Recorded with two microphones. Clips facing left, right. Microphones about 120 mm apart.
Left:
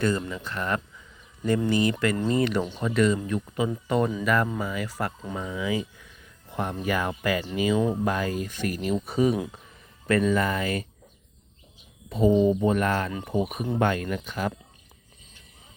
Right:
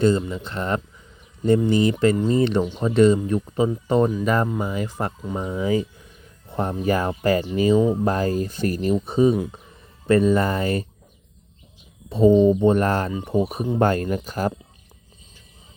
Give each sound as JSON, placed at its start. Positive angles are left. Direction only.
{"t": 0.0, "sound": "speech", "side_deg": -20}
{"t": 12.0, "sound": "speech", "side_deg": -25}